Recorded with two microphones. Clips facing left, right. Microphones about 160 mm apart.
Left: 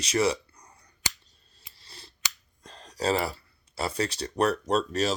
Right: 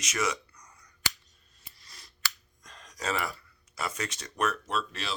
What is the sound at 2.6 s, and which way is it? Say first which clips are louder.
Speech: left 7 dB; 30° left (ahead or behind).